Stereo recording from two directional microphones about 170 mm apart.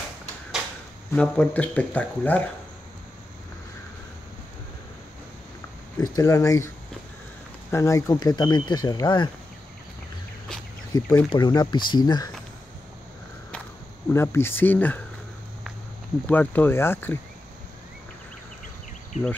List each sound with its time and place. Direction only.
1.1 s speech: 5° left (ahead or behind)
5.9 s speech: 20° left (ahead or behind)
7.7 s speech: 20° left (ahead or behind)
10.9 s speech: 20° left (ahead or behind)
14.1 s speech: 15° left (ahead or behind)
16.3 s speech: 10° left (ahead or behind)